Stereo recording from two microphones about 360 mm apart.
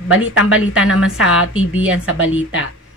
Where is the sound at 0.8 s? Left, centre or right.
Centre.